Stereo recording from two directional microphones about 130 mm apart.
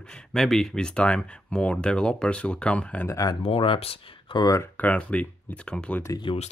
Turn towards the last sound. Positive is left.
turn(degrees=40)  # may be behind; listen again after turning